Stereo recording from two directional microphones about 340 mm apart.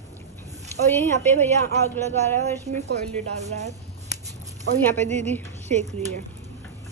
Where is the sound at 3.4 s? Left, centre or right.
Centre.